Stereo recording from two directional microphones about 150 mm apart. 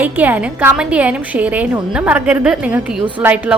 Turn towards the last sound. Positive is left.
turn(degrees=-10)  # may be behind; listen again after turning